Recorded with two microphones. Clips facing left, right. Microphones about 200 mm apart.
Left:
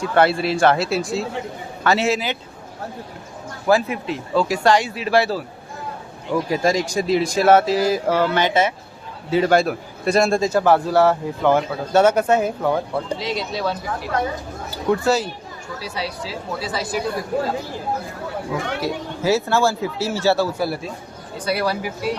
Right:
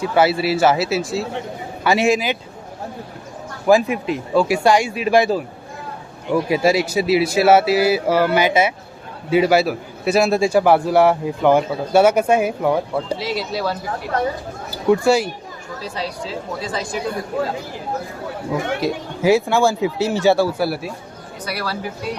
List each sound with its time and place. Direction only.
0.0 s speech: 5° right (ahead or behind)
1.8 s a man's voice: 15° right (ahead or behind)
3.7 s a man's voice: 15° right (ahead or behind)
6.5 s a man's voice: 10° right (ahead or behind)
15.8 s speech: 5° left (ahead or behind)
18.8 s a man's voice: 15° right (ahead or behind)
21.4 s speech: 20° left (ahead or behind)